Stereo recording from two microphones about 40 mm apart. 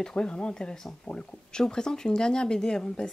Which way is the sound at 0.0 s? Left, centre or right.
Left.